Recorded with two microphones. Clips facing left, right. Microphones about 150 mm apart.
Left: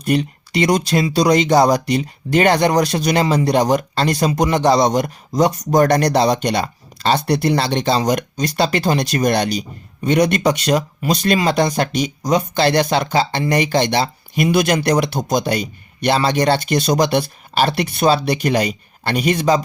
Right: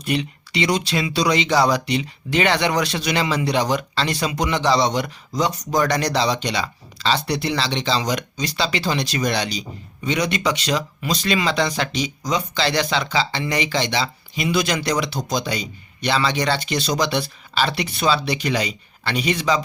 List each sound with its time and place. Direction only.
0.0 s speech: 45° left (ahead or behind)